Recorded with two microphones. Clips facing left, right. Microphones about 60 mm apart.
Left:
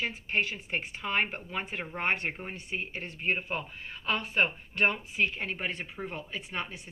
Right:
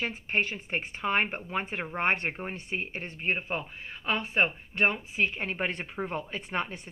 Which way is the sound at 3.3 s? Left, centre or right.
Right.